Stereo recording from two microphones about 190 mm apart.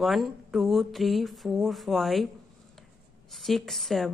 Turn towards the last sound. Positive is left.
turn(degrees=0)  # may be behind; listen again after turning